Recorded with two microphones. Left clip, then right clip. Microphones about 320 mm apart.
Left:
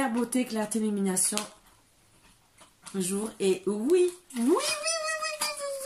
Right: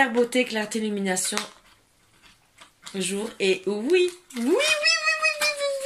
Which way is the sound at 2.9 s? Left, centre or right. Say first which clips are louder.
Right 4 dB; centre.